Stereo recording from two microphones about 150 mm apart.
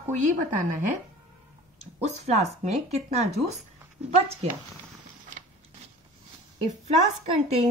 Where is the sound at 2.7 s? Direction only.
45° right (ahead or behind).